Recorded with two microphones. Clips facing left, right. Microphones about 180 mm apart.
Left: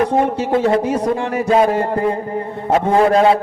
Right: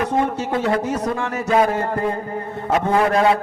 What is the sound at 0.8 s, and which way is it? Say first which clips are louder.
Speech: left 5 dB; 10° left (ahead or behind).